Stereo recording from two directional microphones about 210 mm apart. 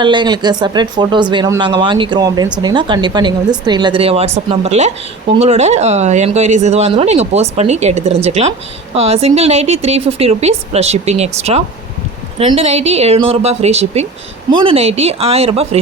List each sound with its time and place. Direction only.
0.0 s speech: 20° right (ahead or behind)